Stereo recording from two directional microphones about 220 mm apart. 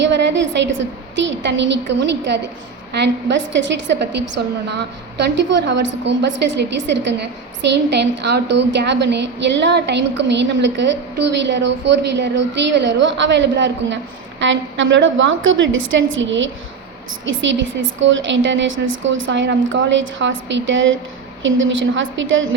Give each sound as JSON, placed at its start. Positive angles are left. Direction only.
{"t": 0.0, "sound": "a woman's voice", "side_deg": -55}